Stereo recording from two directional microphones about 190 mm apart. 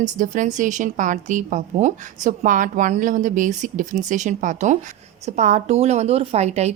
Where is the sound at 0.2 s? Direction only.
40° right (ahead or behind).